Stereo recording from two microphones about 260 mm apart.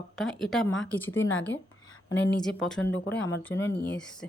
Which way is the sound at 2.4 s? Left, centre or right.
Centre.